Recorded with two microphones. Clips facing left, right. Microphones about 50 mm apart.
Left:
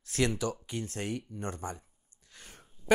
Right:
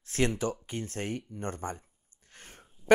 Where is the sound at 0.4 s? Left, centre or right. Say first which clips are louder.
Right 1 dB; right.